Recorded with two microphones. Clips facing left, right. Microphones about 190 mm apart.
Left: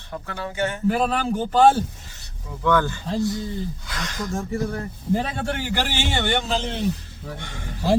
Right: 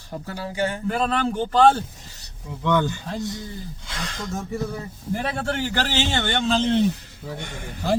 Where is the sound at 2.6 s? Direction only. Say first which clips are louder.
Left 1 dB; 20° right (ahead or behind).